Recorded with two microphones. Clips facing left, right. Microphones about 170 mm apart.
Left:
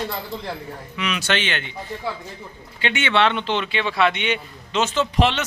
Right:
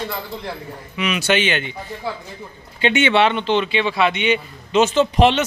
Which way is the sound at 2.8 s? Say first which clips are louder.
Right 4 dB; 20° right (ahead or behind).